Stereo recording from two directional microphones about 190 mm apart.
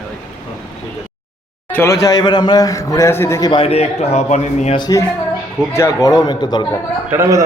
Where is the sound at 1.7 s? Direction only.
15° left (ahead or behind); by 4.8 s 35° left (ahead or behind).